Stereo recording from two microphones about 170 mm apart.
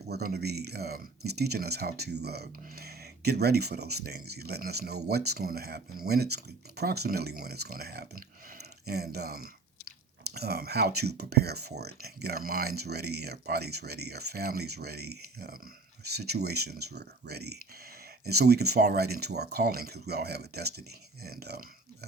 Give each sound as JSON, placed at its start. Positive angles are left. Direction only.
{"t": 0.1, "sound": "speech", "side_deg": -65}